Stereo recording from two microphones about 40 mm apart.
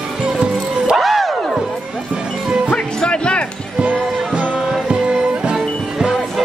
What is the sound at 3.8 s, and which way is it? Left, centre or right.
Music, right.